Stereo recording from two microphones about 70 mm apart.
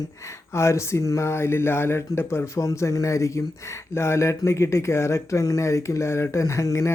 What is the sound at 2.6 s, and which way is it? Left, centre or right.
Speech, left.